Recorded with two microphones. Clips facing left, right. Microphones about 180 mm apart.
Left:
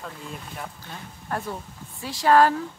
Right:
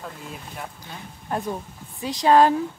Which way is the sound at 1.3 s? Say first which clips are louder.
Right 3 dB; 20° right (ahead or behind).